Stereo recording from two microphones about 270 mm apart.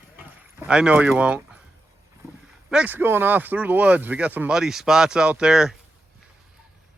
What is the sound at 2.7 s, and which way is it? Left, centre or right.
Speech, centre.